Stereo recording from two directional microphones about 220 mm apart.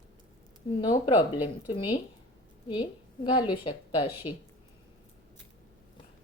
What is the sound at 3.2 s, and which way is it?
Speech, 20° left (ahead or behind).